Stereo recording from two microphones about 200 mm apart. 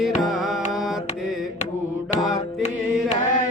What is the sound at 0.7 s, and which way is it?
Mantra, centre (ahead or behind).